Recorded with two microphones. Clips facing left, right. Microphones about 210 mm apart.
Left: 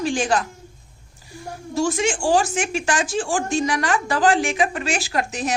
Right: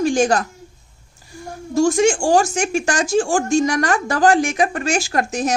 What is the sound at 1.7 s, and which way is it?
Speech, 45° right (ahead or behind).